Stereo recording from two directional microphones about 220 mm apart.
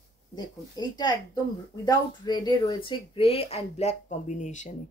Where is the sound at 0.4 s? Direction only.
20° left (ahead or behind).